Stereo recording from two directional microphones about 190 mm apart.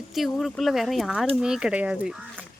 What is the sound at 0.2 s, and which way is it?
Speech, centre (ahead or behind).